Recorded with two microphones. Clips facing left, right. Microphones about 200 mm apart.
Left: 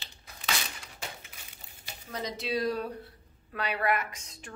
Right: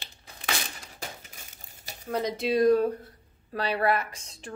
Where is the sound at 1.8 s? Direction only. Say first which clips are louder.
Right 8 dB; 55° right (ahead or behind).